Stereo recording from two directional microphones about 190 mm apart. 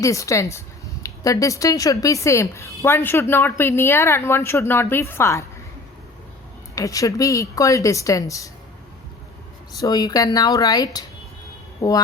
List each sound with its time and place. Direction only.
0.0 s speech: 15° left (ahead or behind)
6.7 s speech: 15° left (ahead or behind)
9.8 s speech: 20° left (ahead or behind)